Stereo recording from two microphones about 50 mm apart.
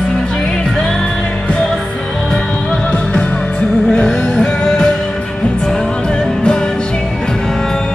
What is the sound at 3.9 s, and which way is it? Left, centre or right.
Music, centre.